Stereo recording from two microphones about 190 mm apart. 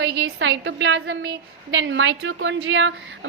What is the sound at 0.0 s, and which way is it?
A woman's voice, 65° right (ahead or behind).